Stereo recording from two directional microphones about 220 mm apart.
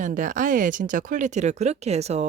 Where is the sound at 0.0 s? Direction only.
35° right (ahead or behind).